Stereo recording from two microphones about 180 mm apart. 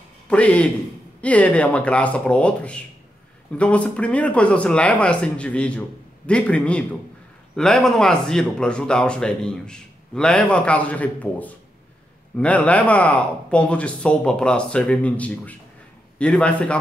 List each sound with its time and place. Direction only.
0.3 s speech: 5° left (ahead or behind)